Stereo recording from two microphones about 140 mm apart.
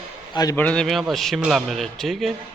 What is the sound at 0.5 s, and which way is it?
Speech, 10° left (ahead or behind).